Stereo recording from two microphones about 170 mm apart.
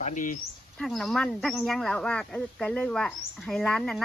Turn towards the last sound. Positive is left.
turn(degrees=5)  # may be behind; listen again after turning